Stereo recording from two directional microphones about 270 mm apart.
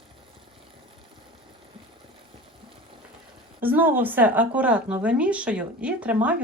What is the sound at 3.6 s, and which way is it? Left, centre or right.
Speech, centre.